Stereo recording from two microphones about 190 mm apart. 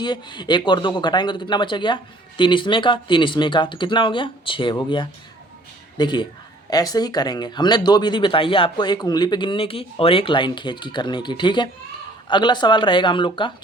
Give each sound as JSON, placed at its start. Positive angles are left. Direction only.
{"t": 0.0, "sound": "speech", "side_deg": 25}